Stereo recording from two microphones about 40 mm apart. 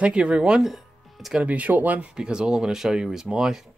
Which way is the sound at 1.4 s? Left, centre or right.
Right.